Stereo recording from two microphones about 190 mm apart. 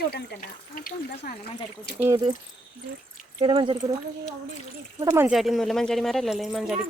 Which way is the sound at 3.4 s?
25° right (ahead or behind).